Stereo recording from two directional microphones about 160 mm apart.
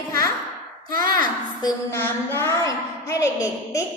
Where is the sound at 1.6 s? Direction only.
25° left (ahead or behind).